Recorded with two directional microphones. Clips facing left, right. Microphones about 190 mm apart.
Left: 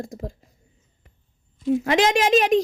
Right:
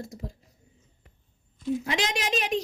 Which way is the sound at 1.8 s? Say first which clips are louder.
Left 10 dB; 50° left (ahead or behind).